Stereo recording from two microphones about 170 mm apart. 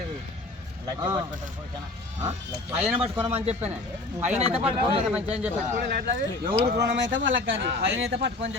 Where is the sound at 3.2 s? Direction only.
35° right (ahead or behind).